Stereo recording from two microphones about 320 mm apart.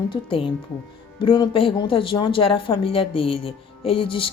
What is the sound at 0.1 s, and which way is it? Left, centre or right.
Speech, centre.